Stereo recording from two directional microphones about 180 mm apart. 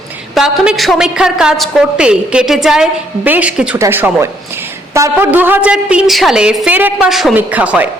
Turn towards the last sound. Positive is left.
turn(degrees=-10)  # may be behind; listen again after turning